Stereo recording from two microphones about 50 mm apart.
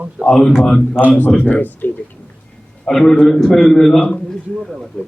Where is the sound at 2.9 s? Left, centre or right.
Centre.